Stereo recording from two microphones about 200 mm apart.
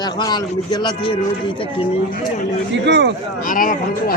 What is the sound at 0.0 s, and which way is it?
A man's voice, 20° left (ahead or behind).